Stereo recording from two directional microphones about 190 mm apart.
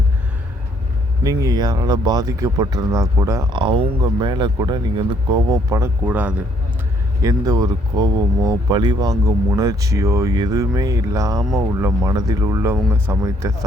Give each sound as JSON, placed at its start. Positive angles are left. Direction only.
{"t": 1.2, "sound": "speech", "side_deg": -20}
{"t": 7.2, "sound": "speech", "side_deg": -20}